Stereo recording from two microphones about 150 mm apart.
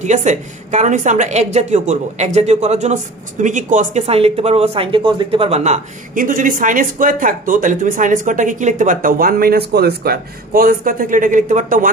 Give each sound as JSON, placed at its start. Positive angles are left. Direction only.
{"t": 0.0, "sound": "a woman's voice", "side_deg": -50}